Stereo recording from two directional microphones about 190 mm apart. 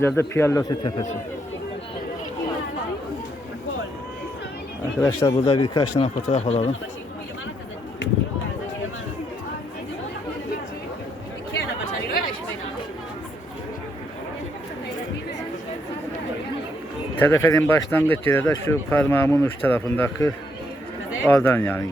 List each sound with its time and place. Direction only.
0.2 s speech: 15° left (ahead or behind)
4.9 s speech: 15° left (ahead or behind)
6.0 s speech: 35° left (ahead or behind)
17.2 s speech: 10° left (ahead or behind)